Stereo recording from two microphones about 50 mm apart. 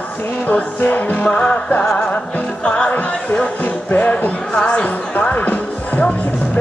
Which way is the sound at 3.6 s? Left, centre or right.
Left.